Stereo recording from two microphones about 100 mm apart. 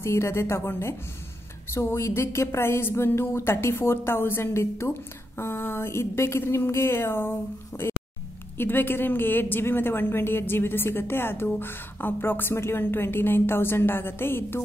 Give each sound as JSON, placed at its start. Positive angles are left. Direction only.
{"t": 0.0, "sound": "a woman's voice", "side_deg": 25}